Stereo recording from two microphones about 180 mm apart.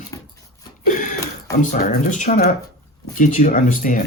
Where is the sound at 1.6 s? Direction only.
45° left (ahead or behind).